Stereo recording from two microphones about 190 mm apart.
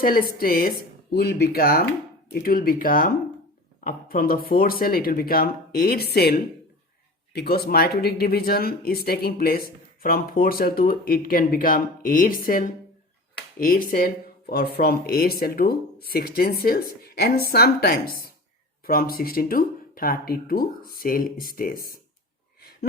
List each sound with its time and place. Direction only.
0.0 s speech: 50° left (ahead or behind)